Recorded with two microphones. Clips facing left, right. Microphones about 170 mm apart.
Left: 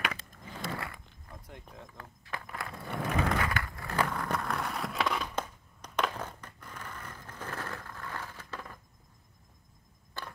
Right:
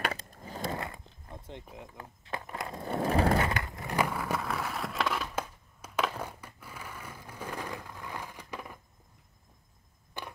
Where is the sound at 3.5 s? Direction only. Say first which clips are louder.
Right 2 dB; 20° right (ahead or behind).